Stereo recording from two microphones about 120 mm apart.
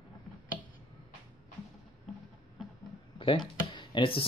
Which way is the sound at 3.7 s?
45° left (ahead or behind).